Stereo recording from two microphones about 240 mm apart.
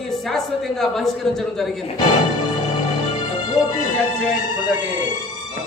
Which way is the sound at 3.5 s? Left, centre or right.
Centre.